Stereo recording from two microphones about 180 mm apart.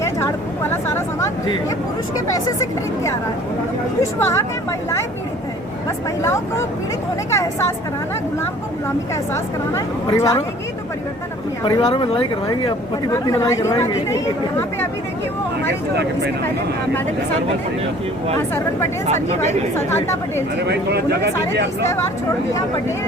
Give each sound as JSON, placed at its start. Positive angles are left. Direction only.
{"t": 0.0, "sound": "a sound", "side_deg": 15}
{"t": 2.5, "sound": "speech", "side_deg": 20}
{"t": 4.2, "sound": "a woman's voice", "side_deg": 15}
{"t": 6.2, "sound": "a woman's voice", "side_deg": 15}
{"t": 9.3, "sound": "a woman's voice", "side_deg": 15}
{"t": 11.6, "sound": "speech", "side_deg": 25}
{"t": 18.3, "sound": "a woman's voice", "side_deg": 10}
{"t": 19.0, "sound": "speech", "side_deg": -40}
{"t": 19.7, "sound": "a woman's voice", "side_deg": 15}
{"t": 20.6, "sound": "speech", "side_deg": -65}